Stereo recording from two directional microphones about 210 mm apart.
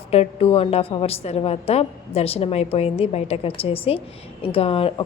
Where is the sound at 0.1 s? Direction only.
30° left (ahead or behind).